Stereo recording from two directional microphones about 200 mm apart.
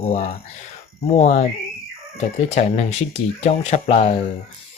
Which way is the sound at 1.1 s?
35° left (ahead or behind).